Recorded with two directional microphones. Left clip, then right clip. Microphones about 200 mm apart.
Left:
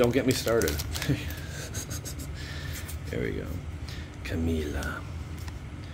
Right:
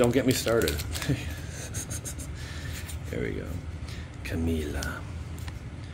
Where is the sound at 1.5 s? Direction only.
10° left (ahead or behind).